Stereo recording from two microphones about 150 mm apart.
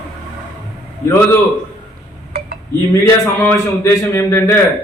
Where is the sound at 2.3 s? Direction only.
90° right.